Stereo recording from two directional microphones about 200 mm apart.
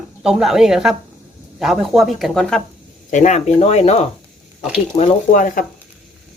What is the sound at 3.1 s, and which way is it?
Speech, 35° left (ahead or behind).